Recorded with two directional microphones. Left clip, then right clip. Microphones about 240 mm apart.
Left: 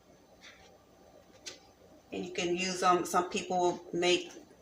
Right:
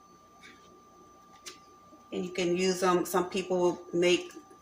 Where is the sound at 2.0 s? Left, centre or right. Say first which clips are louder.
Right 3 dB; centre.